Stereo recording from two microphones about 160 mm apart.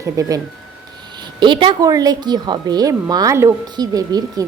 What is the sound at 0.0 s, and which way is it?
Speech, 20° right (ahead or behind).